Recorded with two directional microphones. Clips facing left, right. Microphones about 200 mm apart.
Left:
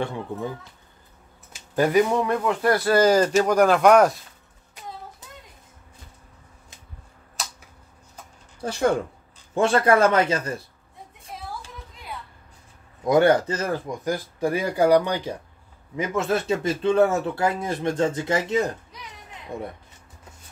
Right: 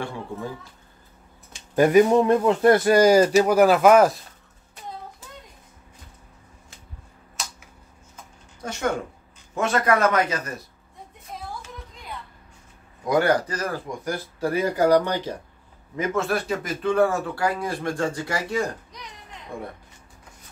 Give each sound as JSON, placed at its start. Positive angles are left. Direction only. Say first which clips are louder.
{"t": 0.0, "sound": "speech", "louder": "left 3 dB", "side_deg": 20}
{"t": 1.8, "sound": "speech", "louder": "right 4 dB", "side_deg": -20}
{"t": 8.5, "sound": "speech", "louder": "left 4 dB", "side_deg": 30}
{"t": 13.0, "sound": "speech", "louder": "left 3 dB", "side_deg": 25}